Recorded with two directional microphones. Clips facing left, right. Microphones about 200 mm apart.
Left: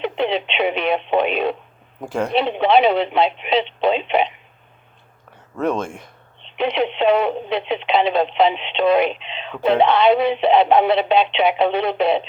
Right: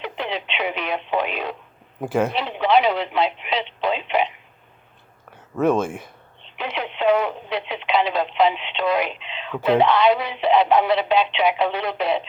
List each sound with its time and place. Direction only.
0.0 s speech: 25° left (ahead or behind)
2.0 s speech: 5° right (ahead or behind)
2.3 s speech: 25° left (ahead or behind)
5.5 s speech: 5° right (ahead or behind)
6.4 s speech: 25° left (ahead or behind)